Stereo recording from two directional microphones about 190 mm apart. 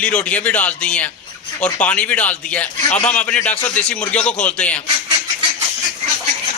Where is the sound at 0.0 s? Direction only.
5° left (ahead or behind).